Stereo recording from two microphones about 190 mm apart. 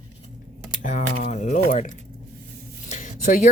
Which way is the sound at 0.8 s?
40° left (ahead or behind).